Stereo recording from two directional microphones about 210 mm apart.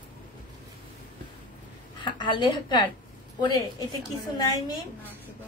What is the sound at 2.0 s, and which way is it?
A woman's voice, 20° left (ahead or behind).